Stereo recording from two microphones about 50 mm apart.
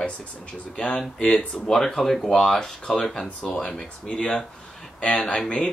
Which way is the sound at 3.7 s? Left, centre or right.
Centre.